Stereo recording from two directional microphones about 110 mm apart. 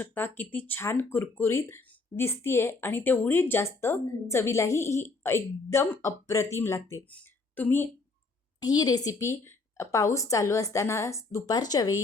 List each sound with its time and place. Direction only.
0.0 s speech: 15° left (ahead or behind)
7.1 s a sound: 15° left (ahead or behind)
8.6 s speech: 35° left (ahead or behind)